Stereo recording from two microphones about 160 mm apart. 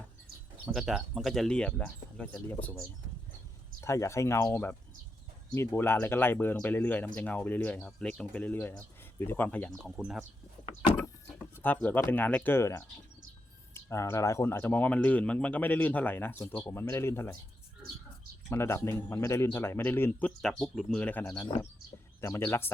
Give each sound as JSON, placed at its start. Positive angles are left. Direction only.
{"t": 0.7, "sound": "speech", "side_deg": 0}
{"t": 11.6, "sound": "speech", "side_deg": 10}
{"t": 18.4, "sound": "speech", "side_deg": 15}